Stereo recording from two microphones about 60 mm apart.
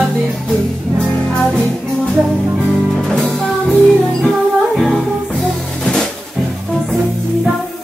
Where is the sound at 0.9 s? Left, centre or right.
Centre.